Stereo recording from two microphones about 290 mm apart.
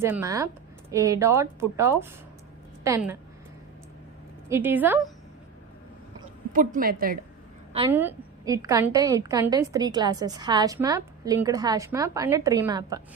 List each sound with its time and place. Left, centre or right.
0.0 s a woman's voice: centre
4.4 s a woman's voice: centre
6.5 s a woman's voice: right
7.9 s a woman's voice: centre